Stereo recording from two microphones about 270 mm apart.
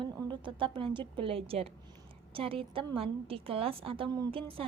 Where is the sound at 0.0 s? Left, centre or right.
Centre.